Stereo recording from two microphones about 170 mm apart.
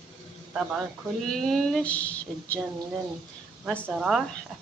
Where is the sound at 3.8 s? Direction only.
5° right (ahead or behind).